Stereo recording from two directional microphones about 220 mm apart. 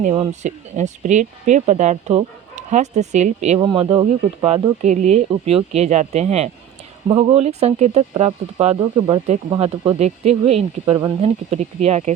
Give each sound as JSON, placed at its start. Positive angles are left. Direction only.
{"t": 0.0, "sound": "speech", "side_deg": -30}
{"t": 3.6, "sound": "speech", "side_deg": -20}
{"t": 4.8, "sound": "speech", "side_deg": -30}